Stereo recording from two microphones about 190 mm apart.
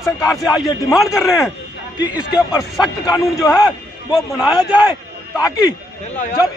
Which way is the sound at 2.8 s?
20° left (ahead or behind).